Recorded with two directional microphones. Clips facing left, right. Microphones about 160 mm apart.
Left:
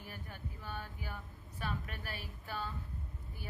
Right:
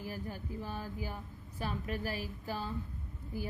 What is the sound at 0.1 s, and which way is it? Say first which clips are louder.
A woman's voice: right 8 dB; 35° right (ahead or behind).